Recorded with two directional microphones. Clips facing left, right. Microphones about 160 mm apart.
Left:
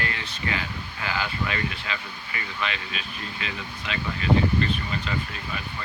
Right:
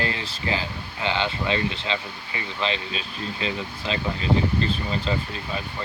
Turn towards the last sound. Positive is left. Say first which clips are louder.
# right 3 dB
turn(degrees=-30)  # may be behind; listen again after turning